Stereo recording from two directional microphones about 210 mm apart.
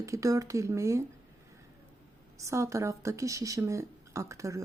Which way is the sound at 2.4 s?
15° right (ahead or behind).